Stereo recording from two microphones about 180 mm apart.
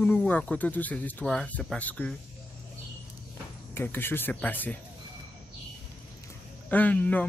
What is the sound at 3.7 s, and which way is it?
Cricket, 10° left (ahead or behind).